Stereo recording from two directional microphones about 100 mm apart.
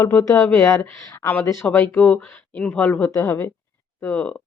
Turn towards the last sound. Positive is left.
turn(degrees=15)  # may be behind; listen again after turning